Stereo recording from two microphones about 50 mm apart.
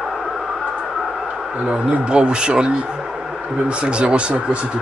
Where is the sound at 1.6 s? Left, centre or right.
Centre.